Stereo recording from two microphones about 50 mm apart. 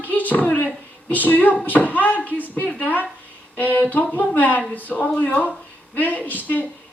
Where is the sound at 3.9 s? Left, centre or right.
Left.